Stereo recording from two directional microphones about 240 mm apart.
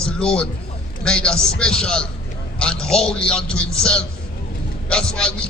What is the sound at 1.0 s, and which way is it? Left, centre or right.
A man's voice, centre.